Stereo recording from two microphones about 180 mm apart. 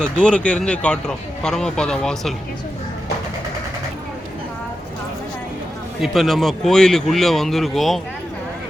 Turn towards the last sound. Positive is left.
turn(degrees=0)  # may be behind; listen again after turning